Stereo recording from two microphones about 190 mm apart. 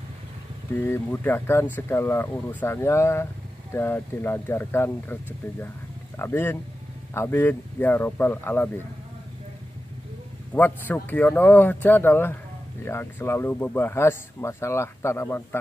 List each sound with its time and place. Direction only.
0.7 s speech: 10° left (ahead or behind)
10.5 s speech: 10° left (ahead or behind)